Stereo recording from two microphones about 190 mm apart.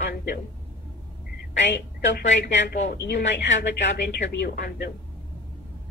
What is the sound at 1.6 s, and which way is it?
Speech, 65° left (ahead or behind).